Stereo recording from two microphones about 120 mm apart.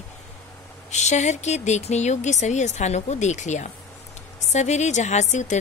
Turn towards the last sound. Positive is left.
turn(degrees=75)  # may be behind; listen again after turning